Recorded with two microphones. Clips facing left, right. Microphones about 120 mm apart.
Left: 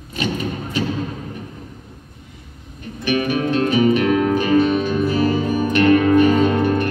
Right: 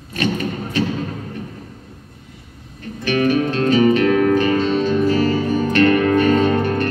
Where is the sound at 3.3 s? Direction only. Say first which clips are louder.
Right 1 dB; 15° left (ahead or behind).